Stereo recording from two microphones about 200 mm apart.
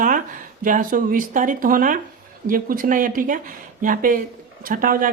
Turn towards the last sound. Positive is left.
turn(degrees=-45)  # may be behind; listen again after turning